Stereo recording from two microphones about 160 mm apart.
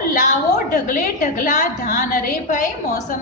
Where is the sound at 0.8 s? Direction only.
55° left (ahead or behind).